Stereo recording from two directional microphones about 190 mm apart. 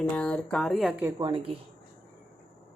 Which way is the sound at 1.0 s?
15° right (ahead or behind).